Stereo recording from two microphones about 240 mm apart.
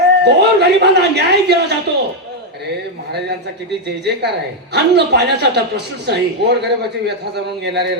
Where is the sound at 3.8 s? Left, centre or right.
Right.